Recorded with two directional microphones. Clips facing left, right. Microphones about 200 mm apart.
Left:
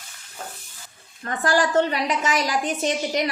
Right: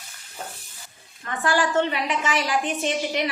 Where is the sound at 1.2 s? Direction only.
40° left (ahead or behind).